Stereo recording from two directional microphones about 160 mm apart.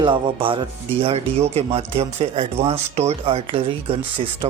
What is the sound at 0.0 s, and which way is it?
Speech, 30° right (ahead or behind).